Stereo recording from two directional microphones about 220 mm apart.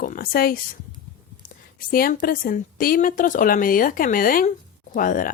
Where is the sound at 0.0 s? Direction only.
40° left (ahead or behind).